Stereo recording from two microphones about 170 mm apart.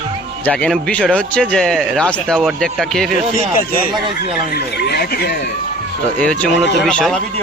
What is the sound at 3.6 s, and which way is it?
Speech, 60° left (ahead or behind).